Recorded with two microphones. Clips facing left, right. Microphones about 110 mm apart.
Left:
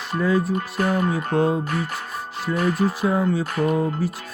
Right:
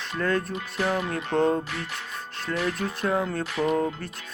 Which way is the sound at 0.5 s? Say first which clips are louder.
Left 4 dB; 45° left (ahead or behind).